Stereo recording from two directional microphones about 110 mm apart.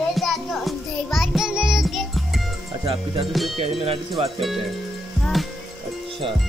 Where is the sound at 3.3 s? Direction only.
Centre (ahead or behind).